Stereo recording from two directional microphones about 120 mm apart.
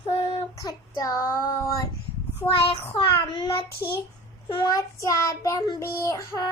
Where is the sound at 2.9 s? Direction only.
45° left (ahead or behind).